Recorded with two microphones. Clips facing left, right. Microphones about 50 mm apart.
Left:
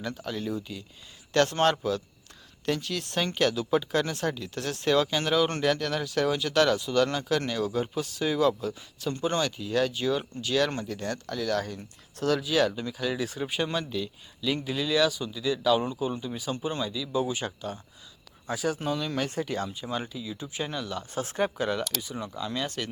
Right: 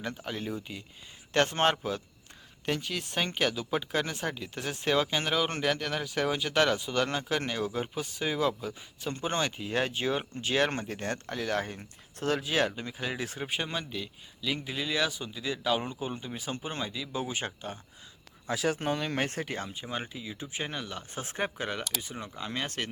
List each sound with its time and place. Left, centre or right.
0.0 s speech: centre
18.4 s speech: right
19.6 s speech: right